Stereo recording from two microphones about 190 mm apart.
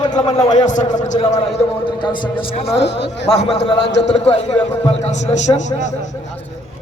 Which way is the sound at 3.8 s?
65° left (ahead or behind).